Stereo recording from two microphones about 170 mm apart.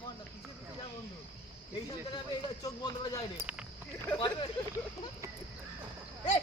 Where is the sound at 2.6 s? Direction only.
20° left (ahead or behind).